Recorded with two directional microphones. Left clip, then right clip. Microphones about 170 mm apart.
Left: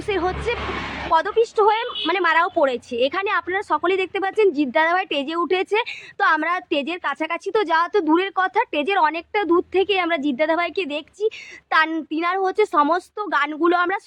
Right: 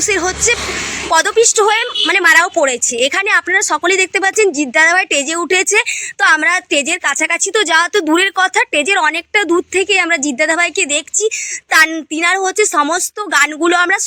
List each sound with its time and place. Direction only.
0.0 s a woman's voice: 15° right (ahead or behind)
4.4 s a woman's voice: 10° right (ahead or behind)